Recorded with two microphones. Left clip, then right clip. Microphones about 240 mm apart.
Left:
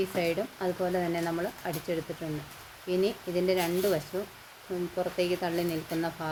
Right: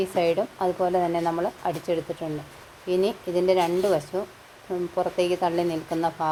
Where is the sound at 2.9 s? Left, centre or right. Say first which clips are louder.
Right 5 dB; centre.